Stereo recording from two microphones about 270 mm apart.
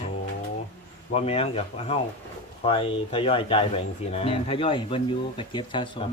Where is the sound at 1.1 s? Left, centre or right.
Left.